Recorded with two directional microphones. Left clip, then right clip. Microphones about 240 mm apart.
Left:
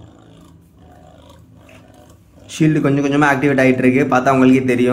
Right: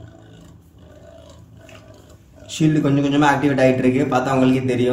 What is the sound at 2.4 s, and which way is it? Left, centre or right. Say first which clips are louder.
A man's voice: left 3 dB; centre.